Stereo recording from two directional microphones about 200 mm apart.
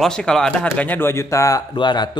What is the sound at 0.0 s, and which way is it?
A man's voice, 5° left (ahead or behind).